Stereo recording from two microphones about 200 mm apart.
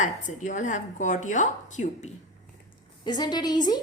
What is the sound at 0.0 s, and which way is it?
Speech, 40° left (ahead or behind).